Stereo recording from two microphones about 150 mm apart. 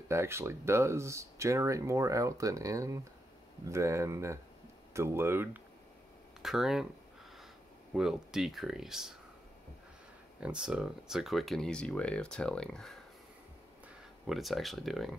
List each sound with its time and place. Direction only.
0.1 s speech: 15° right (ahead or behind)
6.4 s speech: centre (ahead or behind)
7.9 s speech: 5° right (ahead or behind)
10.4 s speech: 5° right (ahead or behind)
14.2 s speech: centre (ahead or behind)